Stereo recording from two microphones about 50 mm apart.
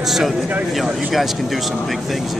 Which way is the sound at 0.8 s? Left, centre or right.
Centre.